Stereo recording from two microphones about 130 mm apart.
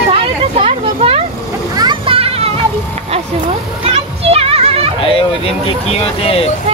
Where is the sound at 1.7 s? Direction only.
40° right (ahead or behind).